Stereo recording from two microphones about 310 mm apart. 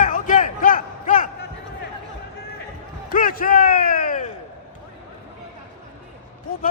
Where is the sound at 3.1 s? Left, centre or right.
Left.